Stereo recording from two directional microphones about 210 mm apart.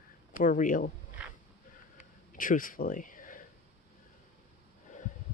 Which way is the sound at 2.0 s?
40° left (ahead or behind).